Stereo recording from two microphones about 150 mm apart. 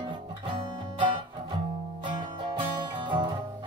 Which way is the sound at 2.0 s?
30° right (ahead or behind).